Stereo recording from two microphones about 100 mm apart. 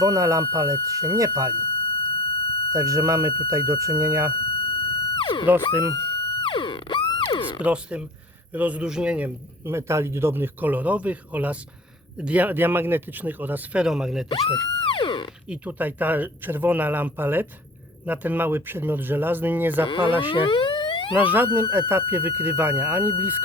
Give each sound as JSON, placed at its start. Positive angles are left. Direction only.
{"t": 0.0, "sound": "speech", "side_deg": -35}
{"t": 2.0, "sound": "smoke detector", "side_deg": 65}
{"t": 2.7, "sound": "speech", "side_deg": -35}
{"t": 4.5, "sound": "music", "side_deg": 65}
{"t": 7.2, "sound": "speech", "side_deg": 55}
{"t": 7.6, "sound": "a man's voice", "side_deg": -10}
{"t": 13.8, "sound": "speech", "side_deg": -5}
{"t": 14.8, "sound": "a sound", "side_deg": 60}
{"t": 15.4, "sound": "a man's voice", "side_deg": -15}
{"t": 20.1, "sound": "a sound", "side_deg": 60}
{"t": 21.2, "sound": "speech", "side_deg": -15}